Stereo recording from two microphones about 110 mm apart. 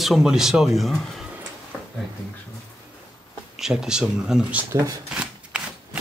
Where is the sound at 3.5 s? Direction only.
5° right (ahead or behind).